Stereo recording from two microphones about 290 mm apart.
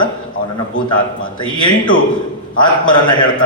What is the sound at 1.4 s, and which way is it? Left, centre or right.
Speech, centre.